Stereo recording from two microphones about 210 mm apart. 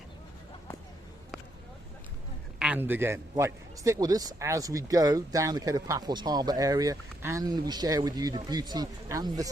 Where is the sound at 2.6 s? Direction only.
5° right (ahead or behind).